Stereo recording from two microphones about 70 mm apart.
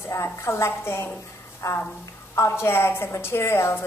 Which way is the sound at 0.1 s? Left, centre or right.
Left.